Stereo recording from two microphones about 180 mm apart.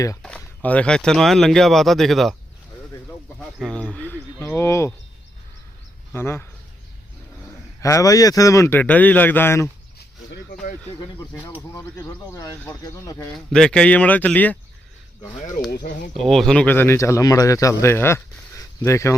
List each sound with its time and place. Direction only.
0.2 s speech: 5° left (ahead or behind)
3.6 s speech: 5° left (ahead or behind)
6.1 s speech: 15° left (ahead or behind)
7.8 s speech: 20° left (ahead or behind)
10.5 s speech: 45° left (ahead or behind)
11.7 s speech: 15° left (ahead or behind)
13.3 s speech: 5° left (ahead or behind)
15.7 s speech: 50° left (ahead or behind)
16.1 s speech: centre (ahead or behind)